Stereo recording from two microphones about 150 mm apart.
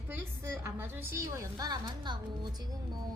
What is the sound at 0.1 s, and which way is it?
A woman's voice, 15° right (ahead or behind).